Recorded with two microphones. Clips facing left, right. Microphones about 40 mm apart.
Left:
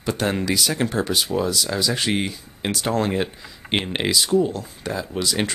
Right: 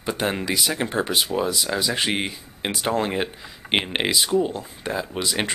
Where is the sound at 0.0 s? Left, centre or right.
Centre.